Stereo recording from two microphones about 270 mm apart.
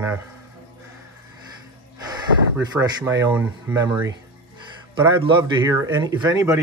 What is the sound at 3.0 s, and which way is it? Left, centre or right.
Speech, centre.